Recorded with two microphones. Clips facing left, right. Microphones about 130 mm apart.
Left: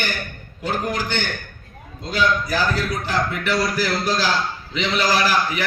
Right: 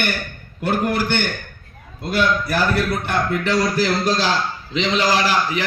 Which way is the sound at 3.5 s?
25° right (ahead or behind).